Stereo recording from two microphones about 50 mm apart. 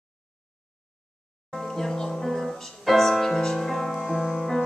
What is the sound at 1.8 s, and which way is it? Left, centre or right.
Music, centre.